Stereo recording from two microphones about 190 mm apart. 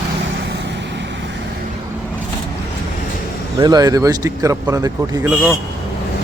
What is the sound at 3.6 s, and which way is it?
Speech, 20° right (ahead or behind).